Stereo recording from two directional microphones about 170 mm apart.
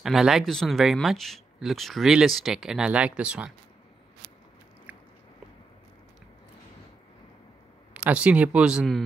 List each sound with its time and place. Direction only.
0.0 s speech: centre (ahead or behind)
7.9 s speech: 5° right (ahead or behind)